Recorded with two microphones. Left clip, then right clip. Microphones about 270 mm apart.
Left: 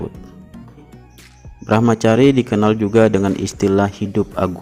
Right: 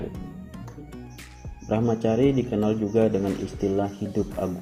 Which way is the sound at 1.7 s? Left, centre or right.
Left.